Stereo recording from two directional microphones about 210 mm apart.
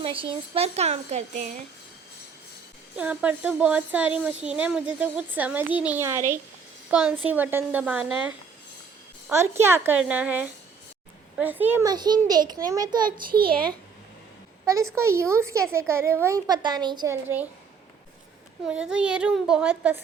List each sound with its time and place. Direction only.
0.0 s speech: 25° right (ahead or behind)
2.9 s a woman's voice: 5° right (ahead or behind)
9.3 s speech: 10° right (ahead or behind)
13.1 s a child's voice: 45° right (ahead or behind)
14.6 s a sound: 15° right (ahead or behind)
14.9 s speech: 15° right (ahead or behind)
18.7 s a woman's voice: 5° right (ahead or behind)